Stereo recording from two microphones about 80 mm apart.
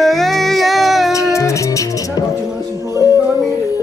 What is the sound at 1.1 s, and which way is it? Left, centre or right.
Music, left.